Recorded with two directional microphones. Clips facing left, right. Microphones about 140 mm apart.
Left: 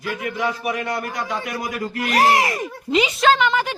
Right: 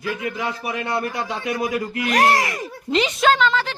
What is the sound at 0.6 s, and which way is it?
A man's voice, 30° right (ahead or behind).